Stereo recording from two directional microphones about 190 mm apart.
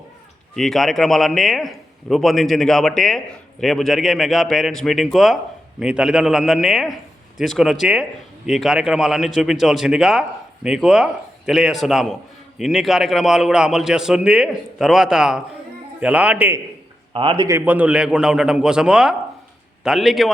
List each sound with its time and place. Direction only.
0.5 s a man's voice: centre (ahead or behind)
17.2 s speech: 25° right (ahead or behind)
17.7 s a man's voice: 5° right (ahead or behind)